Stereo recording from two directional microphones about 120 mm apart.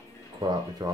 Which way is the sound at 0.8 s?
35° right (ahead or behind).